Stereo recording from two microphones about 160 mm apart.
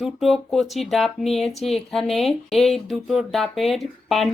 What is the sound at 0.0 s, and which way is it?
Speech, centre (ahead or behind).